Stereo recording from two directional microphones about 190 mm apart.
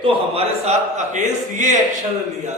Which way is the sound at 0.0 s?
30° right (ahead or behind).